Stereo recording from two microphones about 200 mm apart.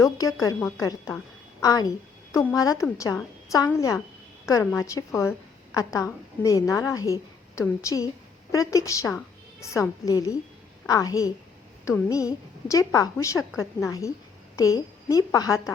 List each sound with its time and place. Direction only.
0.0 s a woman's voice: 15° left (ahead or behind)